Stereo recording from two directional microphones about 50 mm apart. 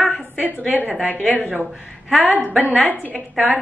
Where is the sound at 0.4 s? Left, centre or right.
Right.